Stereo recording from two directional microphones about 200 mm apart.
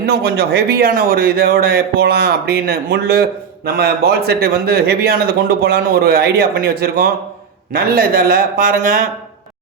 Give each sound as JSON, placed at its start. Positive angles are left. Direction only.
{"t": 0.0, "sound": "a man's voice", "side_deg": -50}